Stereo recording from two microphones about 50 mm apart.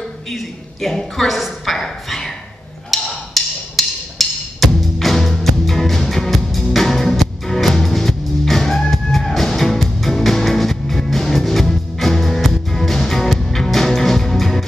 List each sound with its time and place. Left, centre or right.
0.3 s a man's voice: centre
0.9 s a sound: centre
2.9 s wood block: centre